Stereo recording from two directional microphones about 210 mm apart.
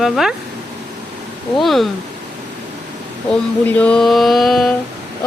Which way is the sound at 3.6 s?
5° left (ahead or behind).